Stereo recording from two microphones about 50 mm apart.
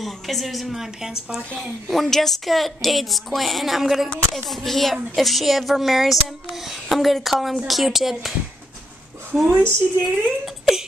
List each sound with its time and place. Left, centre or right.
0.0 s speech: centre
1.6 s speech: centre
9.5 s speech: right
10.0 s speech: centre